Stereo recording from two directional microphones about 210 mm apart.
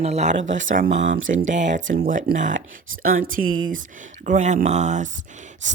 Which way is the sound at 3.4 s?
70° right (ahead or behind).